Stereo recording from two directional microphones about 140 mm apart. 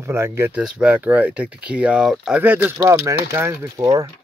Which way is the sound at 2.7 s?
20° right (ahead or behind).